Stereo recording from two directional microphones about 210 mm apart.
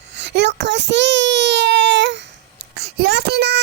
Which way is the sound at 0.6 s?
55° right (ahead or behind).